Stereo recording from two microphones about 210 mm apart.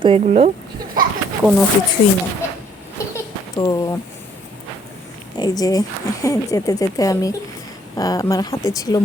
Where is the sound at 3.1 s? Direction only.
20° left (ahead or behind).